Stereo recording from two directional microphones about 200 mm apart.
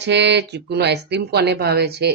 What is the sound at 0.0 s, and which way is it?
Speech, 60° right (ahead or behind).